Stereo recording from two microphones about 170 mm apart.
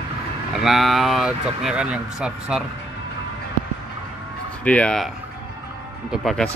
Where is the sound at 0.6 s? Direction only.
Centre (ahead or behind).